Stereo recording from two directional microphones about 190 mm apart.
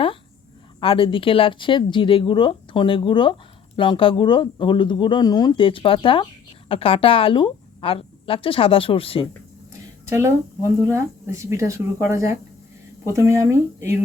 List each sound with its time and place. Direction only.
0.8 s speech: 30° left (ahead or behind)
10.1 s speech: 15° right (ahead or behind)